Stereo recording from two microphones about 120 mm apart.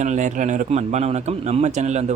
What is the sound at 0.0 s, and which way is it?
Speech, 85° right.